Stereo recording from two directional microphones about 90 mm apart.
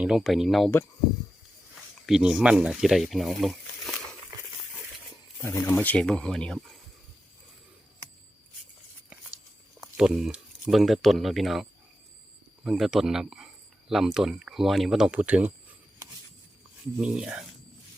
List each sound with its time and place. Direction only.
0.0 s speech: 5° right (ahead or behind)
2.0 s speech: 5° right (ahead or behind)
5.4 s speech: 30° left (ahead or behind)
5.8 s speech: 15° left (ahead or behind)
9.8 s speech: 5° right (ahead or behind)
17.0 s speech: 10° right (ahead or behind)